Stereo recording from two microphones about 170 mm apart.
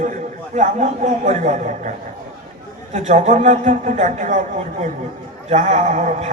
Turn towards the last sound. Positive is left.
turn(degrees=-45)  # may be behind; listen again after turning